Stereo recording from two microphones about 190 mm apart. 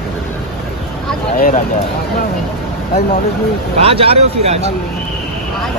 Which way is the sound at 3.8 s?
30° right (ahead or behind).